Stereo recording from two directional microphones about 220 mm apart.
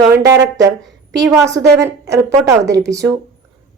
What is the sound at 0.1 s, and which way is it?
A woman's voice, 15° right (ahead or behind).